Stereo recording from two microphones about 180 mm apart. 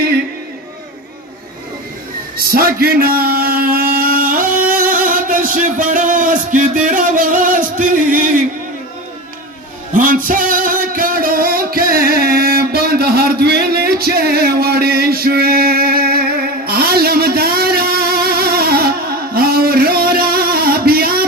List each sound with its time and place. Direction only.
2.4 s a sound: 55° right (ahead or behind)
6.8 s music: 45° right (ahead or behind)
9.9 s music: 50° right (ahead or behind)